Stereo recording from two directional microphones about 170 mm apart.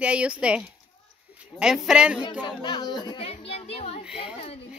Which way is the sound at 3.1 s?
35° left (ahead or behind).